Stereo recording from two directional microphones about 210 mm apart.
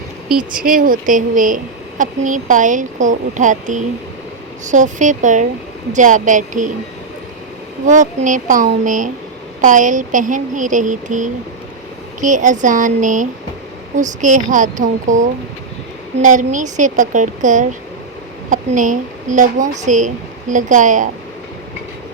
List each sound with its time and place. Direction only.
0.5 s a woman's voice: 40° right (ahead or behind)
7.9 s a woman's voice: 35° right (ahead or behind)